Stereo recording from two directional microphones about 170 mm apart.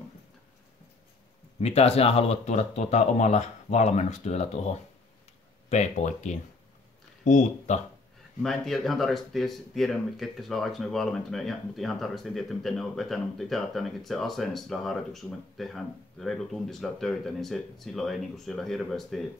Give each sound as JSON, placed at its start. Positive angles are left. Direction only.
{"t": 1.6, "sound": "speech", "side_deg": 40}
{"t": 8.4, "sound": "speech", "side_deg": 0}